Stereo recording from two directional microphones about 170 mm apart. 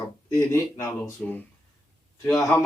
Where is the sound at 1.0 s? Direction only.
10° left (ahead or behind).